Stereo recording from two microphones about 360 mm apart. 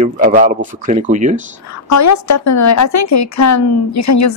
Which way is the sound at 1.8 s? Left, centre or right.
Left.